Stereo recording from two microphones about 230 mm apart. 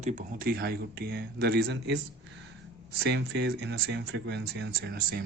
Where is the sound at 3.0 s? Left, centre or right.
Right.